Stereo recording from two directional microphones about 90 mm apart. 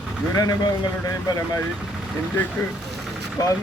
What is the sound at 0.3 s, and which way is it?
Speech, 45° left (ahead or behind).